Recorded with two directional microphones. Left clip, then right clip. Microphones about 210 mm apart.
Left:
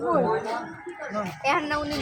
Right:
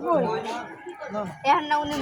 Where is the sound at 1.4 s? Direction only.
35° left (ahead or behind).